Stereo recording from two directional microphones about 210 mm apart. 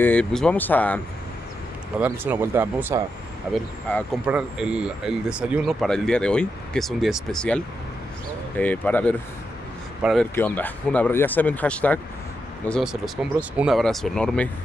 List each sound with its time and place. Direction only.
0.0 s speech: 5° left (ahead or behind)
2.0 s speech: 10° right (ahead or behind)
4.3 s speech: 5° right (ahead or behind)
10.3 s speech: 10° left (ahead or behind)